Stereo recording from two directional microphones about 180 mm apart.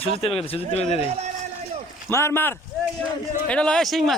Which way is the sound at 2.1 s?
15° left (ahead or behind).